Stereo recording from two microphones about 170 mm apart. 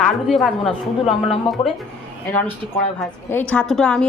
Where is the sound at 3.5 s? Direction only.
5° left (ahead or behind).